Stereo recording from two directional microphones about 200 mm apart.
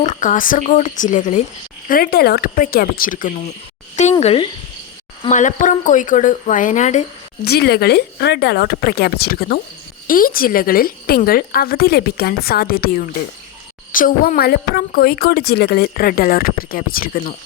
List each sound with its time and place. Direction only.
0.0 s a woman's voice: 40° left (ahead or behind)
4.2 s speech: 30° left (ahead or behind)
7.4 s a woman's voice: 50° left (ahead or behind)
13.9 s a woman's voice: 45° left (ahead or behind)